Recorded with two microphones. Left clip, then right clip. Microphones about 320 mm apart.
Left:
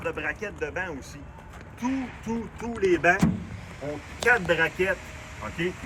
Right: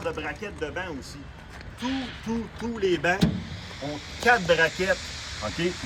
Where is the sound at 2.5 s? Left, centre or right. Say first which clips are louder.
Left 2 dB; centre.